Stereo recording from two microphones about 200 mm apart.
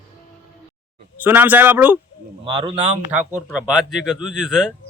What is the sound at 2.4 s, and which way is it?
Speech, 25° right (ahead or behind).